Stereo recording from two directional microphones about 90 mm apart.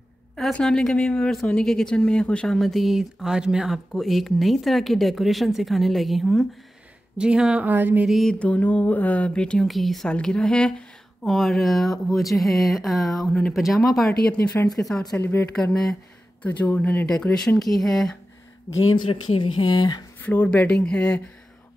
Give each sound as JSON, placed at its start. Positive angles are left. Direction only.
{"t": 0.4, "sound": "speech", "side_deg": 10}
{"t": 7.2, "sound": "speech", "side_deg": -10}
{"t": 8.0, "sound": "speech", "side_deg": 0}
{"t": 8.3, "sound": "speech", "side_deg": 15}
{"t": 14.3, "sound": "speech", "side_deg": 20}
{"t": 14.7, "sound": "speech", "side_deg": 5}
{"t": 15.1, "sound": "speech", "side_deg": 20}
{"t": 15.5, "sound": "speech", "side_deg": 5}
{"t": 16.4, "sound": "speech", "side_deg": 20}
{"t": 17.1, "sound": "speech", "side_deg": 5}
{"t": 18.9, "sound": "speech", "side_deg": 75}
{"t": 19.6, "sound": "speech", "side_deg": 50}
{"t": 20.2, "sound": "speech", "side_deg": 20}